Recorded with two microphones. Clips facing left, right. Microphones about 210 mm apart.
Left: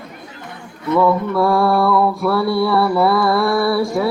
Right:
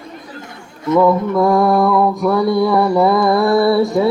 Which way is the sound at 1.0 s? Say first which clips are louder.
Right 3 dB; 15° right (ahead or behind).